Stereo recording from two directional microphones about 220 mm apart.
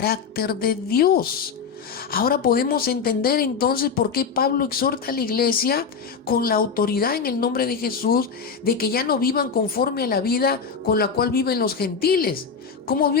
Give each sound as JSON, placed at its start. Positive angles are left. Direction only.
{"t": 0.0, "sound": "speech", "side_deg": 45}